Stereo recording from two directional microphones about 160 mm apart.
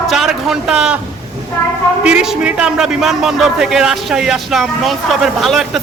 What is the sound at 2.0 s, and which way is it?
A man's voice, 5° right (ahead or behind).